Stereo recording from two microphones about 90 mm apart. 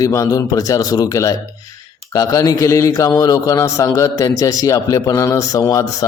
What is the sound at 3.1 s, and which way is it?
A man's voice, 45° left (ahead or behind).